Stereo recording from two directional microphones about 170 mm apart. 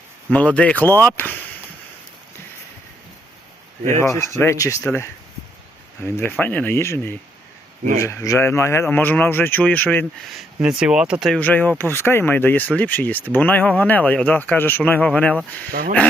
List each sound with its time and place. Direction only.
0.3 s speech: 5° left (ahead or behind)
3.8 s speech: 15° left (ahead or behind)
10.3 s speech: 5° right (ahead or behind)
11.3 s speech: 10° left (ahead or behind)